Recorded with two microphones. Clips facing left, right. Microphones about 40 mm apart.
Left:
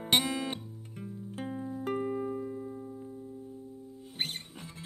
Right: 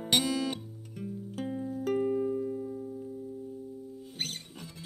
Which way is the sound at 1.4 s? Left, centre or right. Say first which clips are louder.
Right 2 dB; centre.